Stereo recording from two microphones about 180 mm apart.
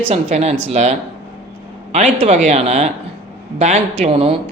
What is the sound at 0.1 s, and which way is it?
Speech, 35° right (ahead or behind).